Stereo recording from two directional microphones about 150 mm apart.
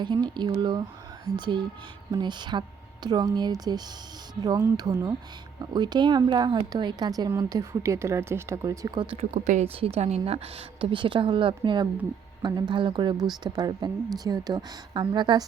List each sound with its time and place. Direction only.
0.0 s a woman's voice: 30° right (ahead or behind)
9.1 s a woman's voice: 50° right (ahead or behind); by 15.4 s 30° right (ahead or behind)